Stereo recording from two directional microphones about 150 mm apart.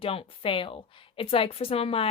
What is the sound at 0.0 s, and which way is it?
A woman's voice, 40° left (ahead or behind).